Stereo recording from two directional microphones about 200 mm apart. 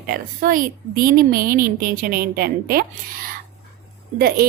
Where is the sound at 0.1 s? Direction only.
45° right (ahead or behind).